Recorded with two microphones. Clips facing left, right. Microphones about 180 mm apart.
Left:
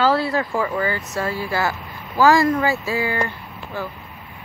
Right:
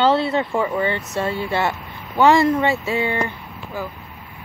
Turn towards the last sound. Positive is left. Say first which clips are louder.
# even
turn(degrees=-15)  # may be behind; listen again after turning